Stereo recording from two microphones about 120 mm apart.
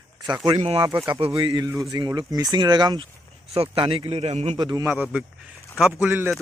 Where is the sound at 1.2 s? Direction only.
45° right (ahead or behind).